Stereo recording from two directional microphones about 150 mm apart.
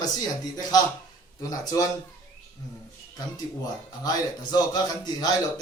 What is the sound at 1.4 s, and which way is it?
Speech, 20° left (ahead or behind).